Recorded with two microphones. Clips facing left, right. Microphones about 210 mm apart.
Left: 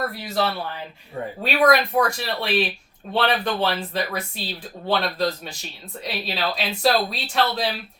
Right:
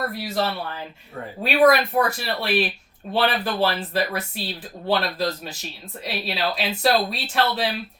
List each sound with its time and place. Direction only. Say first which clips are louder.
0.2 s speech: even; centre (ahead or behind)